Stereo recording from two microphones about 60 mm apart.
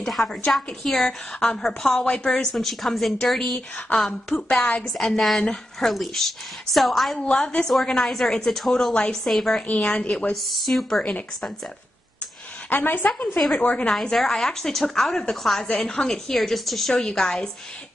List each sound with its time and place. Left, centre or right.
0.0 s a woman's voice: centre
7.2 s a woman's voice: centre
9.3 s speech: centre
9.6 s a woman's voice: centre
10.3 s speech: centre
11.0 s a woman's voice: centre
12.6 s a woman's voice: left
13.9 s a woman's voice: centre